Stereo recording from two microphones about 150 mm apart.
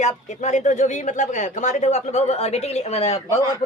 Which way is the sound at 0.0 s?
50° left (ahead or behind).